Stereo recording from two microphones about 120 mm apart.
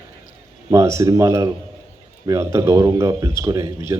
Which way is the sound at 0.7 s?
25° right (ahead or behind).